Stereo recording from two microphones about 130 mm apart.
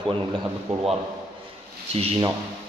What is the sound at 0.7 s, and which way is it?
Speech, 55° right (ahead or behind).